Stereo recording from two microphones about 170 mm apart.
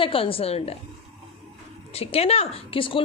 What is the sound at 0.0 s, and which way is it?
Speech, 30° left (ahead or behind).